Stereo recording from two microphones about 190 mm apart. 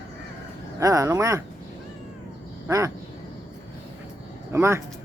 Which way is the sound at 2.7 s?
15° right (ahead or behind).